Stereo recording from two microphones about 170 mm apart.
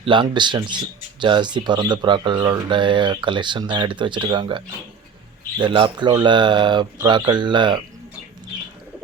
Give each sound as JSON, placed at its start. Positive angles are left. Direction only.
{"t": 0.0, "sound": "speech", "side_deg": -30}